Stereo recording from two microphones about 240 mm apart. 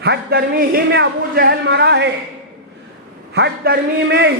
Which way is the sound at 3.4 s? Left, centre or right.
Right.